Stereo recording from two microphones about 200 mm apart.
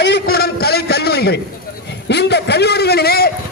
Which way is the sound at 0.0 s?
55° left (ahead or behind).